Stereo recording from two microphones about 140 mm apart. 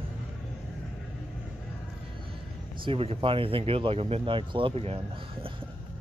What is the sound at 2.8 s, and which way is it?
Speech, 40° right (ahead or behind).